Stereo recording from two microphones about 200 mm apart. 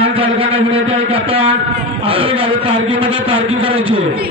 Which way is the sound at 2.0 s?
25° right (ahead or behind).